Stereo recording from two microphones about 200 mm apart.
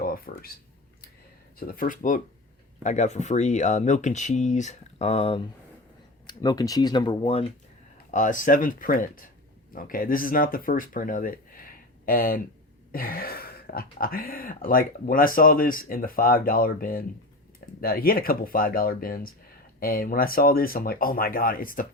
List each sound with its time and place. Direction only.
0.0 s a sound: 45° left (ahead or behind)
1.5 s speech: 45° left (ahead or behind); by 7.4 s 25° left (ahead or behind)
8.1 s speech: 40° left (ahead or behind)